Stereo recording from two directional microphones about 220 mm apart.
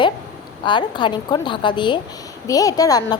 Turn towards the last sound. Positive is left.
turn(degrees=15)  # may be behind; listen again after turning